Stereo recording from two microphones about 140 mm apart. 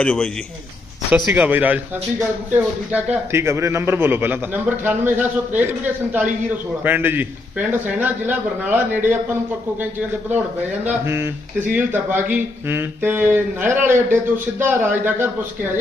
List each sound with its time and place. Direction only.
0.0 s a man's voice: 10° left (ahead or behind)
1.3 s speech: 10° right (ahead or behind)
10.8 s speech: 15° right (ahead or behind)